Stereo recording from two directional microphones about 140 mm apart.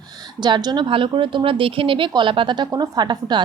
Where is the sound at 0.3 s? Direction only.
30° right (ahead or behind).